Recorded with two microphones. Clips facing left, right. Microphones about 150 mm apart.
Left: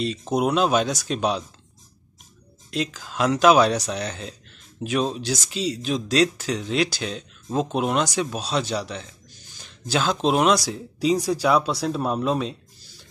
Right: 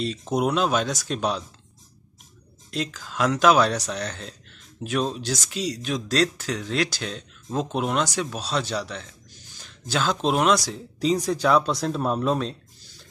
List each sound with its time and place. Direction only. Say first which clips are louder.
0.0 s speech: left 1 dB; centre (ahead or behind)
2.7 s speech: left 2 dB; 5° left (ahead or behind)
5.5 s speech: left 3 dB; 30° left (ahead or behind)
6.0 s speech: left 3 dB; 5° left (ahead or behind)
6.9 s speech: left 3 dB; 5° left (ahead or behind)